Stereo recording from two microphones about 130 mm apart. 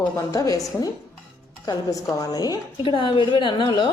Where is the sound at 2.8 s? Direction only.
40° left (ahead or behind).